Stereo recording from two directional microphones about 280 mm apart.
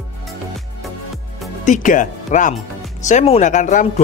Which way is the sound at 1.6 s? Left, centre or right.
Left.